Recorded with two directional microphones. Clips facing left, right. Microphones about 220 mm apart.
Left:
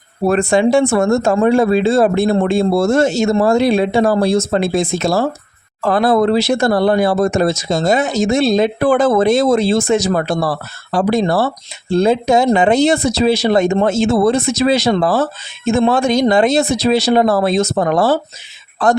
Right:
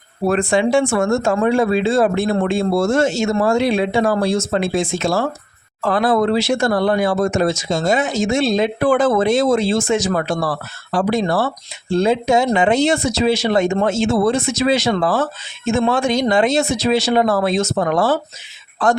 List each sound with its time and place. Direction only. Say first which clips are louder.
0.3 s speech: left 3 dB; 40° left (ahead or behind)